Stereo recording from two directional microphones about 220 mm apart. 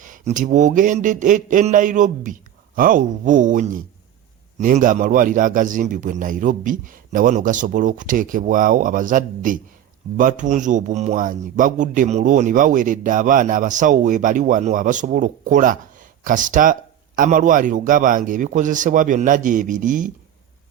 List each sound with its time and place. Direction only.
0.0 s speech: 35° right (ahead or behind)